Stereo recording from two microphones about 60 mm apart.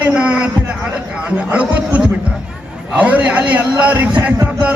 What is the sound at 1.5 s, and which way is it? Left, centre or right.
A man's voice, right.